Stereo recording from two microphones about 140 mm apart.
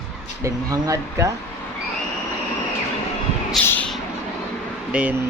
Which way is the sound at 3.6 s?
10° left (ahead or behind).